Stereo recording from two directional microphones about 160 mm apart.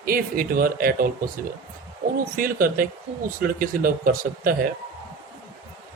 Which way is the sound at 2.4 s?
60° right (ahead or behind).